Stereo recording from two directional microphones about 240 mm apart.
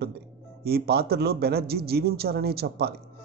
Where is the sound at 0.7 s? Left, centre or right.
Right.